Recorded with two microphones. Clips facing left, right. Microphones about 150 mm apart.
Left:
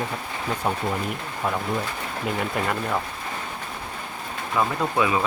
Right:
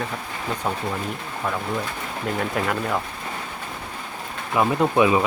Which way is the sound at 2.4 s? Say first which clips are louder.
Right 2 dB; centre (ahead or behind).